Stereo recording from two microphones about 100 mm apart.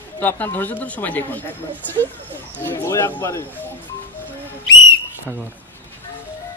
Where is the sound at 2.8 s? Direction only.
30° left (ahead or behind).